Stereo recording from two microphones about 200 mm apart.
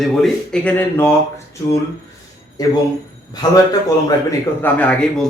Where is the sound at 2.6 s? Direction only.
20° left (ahead or behind).